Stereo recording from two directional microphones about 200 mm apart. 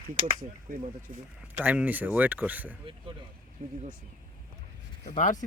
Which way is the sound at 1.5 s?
10° right (ahead or behind).